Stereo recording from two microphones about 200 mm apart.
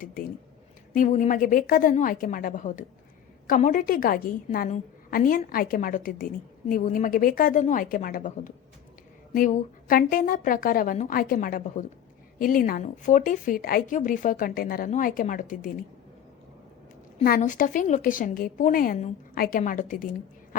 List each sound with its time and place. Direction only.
0.9 s speech: 40° left (ahead or behind)
17.2 s a woman's voice: 45° left (ahead or behind)